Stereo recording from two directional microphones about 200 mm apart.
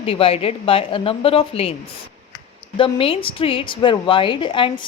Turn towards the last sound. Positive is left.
turn(degrees=25)  # may be behind; listen again after turning